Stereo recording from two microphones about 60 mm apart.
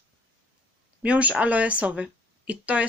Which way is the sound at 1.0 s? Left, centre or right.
Right.